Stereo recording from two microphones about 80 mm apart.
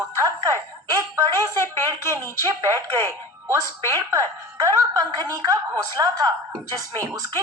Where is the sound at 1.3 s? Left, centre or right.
Right.